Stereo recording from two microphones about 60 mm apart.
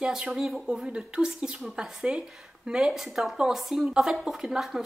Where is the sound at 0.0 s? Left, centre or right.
Centre.